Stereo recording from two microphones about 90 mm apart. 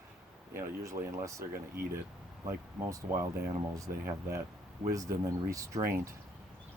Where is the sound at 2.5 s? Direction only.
35° right (ahead or behind).